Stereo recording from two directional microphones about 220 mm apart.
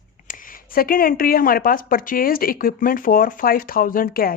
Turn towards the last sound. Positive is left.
turn(degrees=40)  # may be behind; listen again after turning